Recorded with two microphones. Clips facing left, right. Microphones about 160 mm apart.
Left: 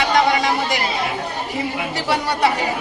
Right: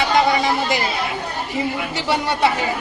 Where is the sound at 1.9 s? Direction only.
Centre (ahead or behind).